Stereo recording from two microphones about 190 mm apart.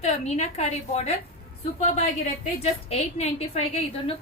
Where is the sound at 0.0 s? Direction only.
35° left (ahead or behind).